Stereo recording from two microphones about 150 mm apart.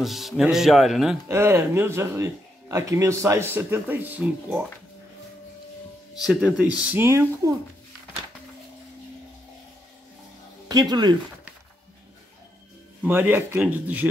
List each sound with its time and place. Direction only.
0.0 s speech: centre (ahead or behind)
1.3 s speech: 15° right (ahead or behind)
6.2 s speech: centre (ahead or behind)
6.8 s speech: 10° right (ahead or behind)
10.7 s speech: 25° right (ahead or behind)
13.0 s speech: 10° right (ahead or behind)